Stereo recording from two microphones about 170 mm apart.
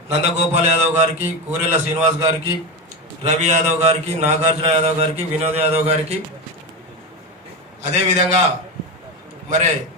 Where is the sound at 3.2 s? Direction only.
40° right (ahead or behind).